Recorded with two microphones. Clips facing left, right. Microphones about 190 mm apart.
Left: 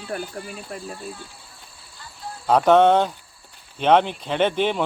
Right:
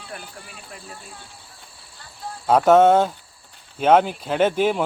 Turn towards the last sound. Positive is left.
turn(degrees=-5)  # may be behind; listen again after turning